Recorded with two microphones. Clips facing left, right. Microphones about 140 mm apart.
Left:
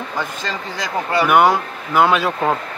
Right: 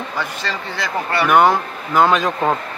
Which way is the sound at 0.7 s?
15° left (ahead or behind).